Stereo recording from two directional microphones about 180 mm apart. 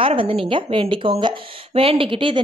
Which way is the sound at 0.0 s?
30° right (ahead or behind).